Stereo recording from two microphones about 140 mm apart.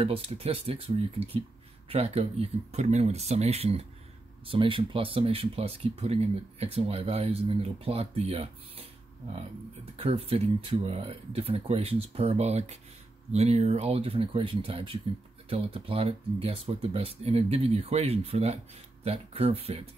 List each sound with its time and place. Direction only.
0.0 s speech: 45° right (ahead or behind)
9.9 s speech: 45° right (ahead or behind)